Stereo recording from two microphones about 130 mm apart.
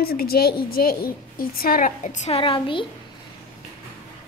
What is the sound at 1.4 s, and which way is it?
Speech, 90° left.